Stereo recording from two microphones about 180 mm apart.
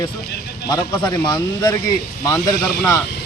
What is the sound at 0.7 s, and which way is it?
Speech, 20° left (ahead or behind).